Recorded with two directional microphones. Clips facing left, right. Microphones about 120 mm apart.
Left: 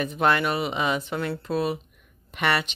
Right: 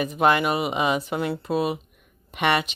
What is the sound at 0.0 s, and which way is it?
Speech, 5° right (ahead or behind).